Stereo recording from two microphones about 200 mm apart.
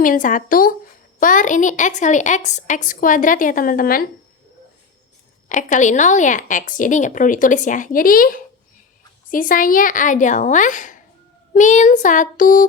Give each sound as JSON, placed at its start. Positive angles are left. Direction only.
{"t": 0.0, "sound": "a woman's voice", "side_deg": 40}
{"t": 5.5, "sound": "a woman's voice", "side_deg": 40}